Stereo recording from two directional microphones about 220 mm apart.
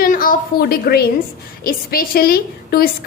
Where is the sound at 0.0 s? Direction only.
40° left (ahead or behind).